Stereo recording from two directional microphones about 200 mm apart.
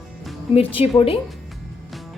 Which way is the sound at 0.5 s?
30° left (ahead or behind).